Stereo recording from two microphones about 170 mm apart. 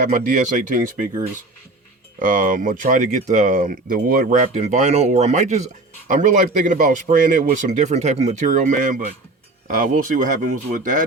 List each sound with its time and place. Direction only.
0.0 s speech: 50° right (ahead or behind)